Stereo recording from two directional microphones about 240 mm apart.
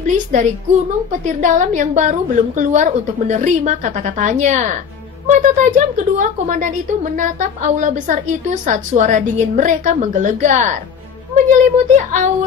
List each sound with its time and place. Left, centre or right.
0.0 s a woman's voice: right